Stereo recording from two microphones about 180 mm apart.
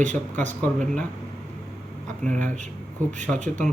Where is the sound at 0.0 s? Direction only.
40° right (ahead or behind).